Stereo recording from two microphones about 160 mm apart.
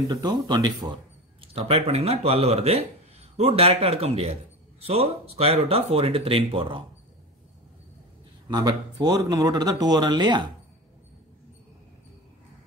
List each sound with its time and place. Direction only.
0.1 s speech: 25° right (ahead or behind)
1.5 s a man's voice: 40° right (ahead or behind)
8.5 s speech: 25° right (ahead or behind)